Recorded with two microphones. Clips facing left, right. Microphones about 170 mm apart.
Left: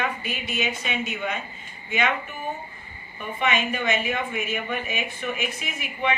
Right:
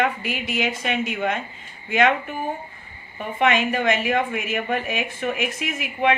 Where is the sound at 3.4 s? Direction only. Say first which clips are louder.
Right 5 dB; 80° right.